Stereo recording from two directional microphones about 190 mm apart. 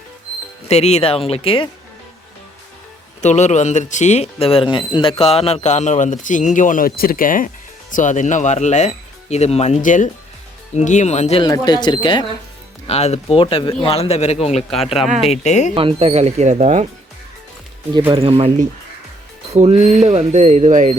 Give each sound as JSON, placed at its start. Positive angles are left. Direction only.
{"t": 0.7, "sound": "speech", "side_deg": 35}
{"t": 3.2, "sound": "speech", "side_deg": 40}
{"t": 11.4, "sound": "speech", "side_deg": 20}
{"t": 12.9, "sound": "speech", "side_deg": 35}
{"t": 14.7, "sound": "speech", "side_deg": 0}
{"t": 15.3, "sound": "speech", "side_deg": 35}
{"t": 15.7, "sound": "speech", "side_deg": -30}
{"t": 18.1, "sound": "speech", "side_deg": -30}